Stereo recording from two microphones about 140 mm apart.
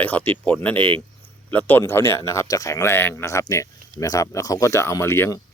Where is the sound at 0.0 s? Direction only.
10° left (ahead or behind).